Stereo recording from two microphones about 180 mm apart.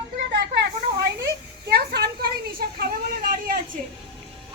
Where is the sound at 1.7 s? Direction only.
60° right (ahead or behind).